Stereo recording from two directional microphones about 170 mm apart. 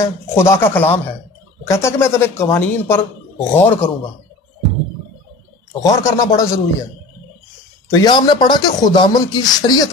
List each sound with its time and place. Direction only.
0.0 s speech: 15° left (ahead or behind)
5.8 s a man's voice: 20° left (ahead or behind)
7.9 s a man's voice: 25° left (ahead or behind)